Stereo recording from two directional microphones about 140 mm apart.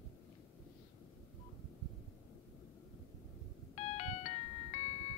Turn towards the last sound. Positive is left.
turn(degrees=50)  # may be behind; listen again after turning